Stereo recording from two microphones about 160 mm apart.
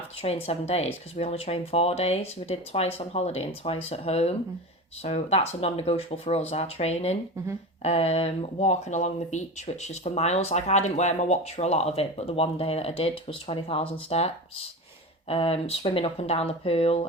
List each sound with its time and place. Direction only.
0.2 s speech: 40° left (ahead or behind)